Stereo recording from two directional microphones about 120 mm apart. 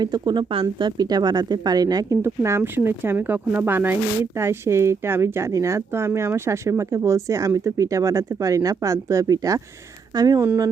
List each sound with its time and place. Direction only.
0.0 s speech: 35° right (ahead or behind)
2.2 s speech: 20° right (ahead or behind)